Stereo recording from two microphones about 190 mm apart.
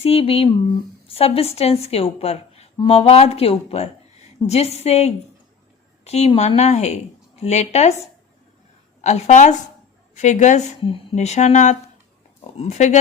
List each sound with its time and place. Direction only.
0.0 s a woman's voice: 30° left (ahead or behind)
9.0 s a woman's voice: 35° left (ahead or behind)